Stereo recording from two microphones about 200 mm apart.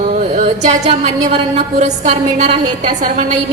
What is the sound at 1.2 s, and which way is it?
A woman's voice, 30° right (ahead or behind).